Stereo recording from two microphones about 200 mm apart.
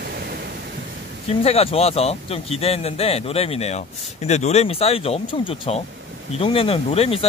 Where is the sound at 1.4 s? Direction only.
30° left (ahead or behind).